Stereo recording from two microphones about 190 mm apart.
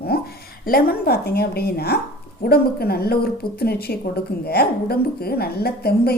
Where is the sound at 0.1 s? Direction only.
55° left (ahead or behind).